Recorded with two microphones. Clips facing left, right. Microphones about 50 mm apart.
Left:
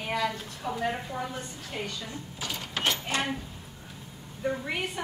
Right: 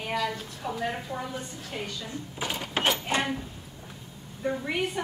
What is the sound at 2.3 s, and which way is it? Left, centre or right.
Mechanisms, right.